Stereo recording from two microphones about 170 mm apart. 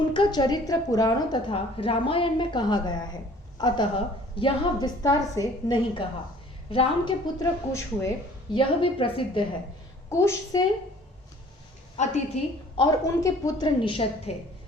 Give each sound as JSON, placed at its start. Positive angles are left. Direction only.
{"t": 0.1, "sound": "a woman's voice", "side_deg": 25}
{"t": 7.3, "sound": "speech", "side_deg": 15}
{"t": 8.5, "sound": "a woman's voice", "side_deg": 30}
{"t": 10.1, "sound": "speech", "side_deg": 15}
{"t": 11.9, "sound": "a woman's voice", "side_deg": 40}
{"t": 12.7, "sound": "a woman's voice", "side_deg": 20}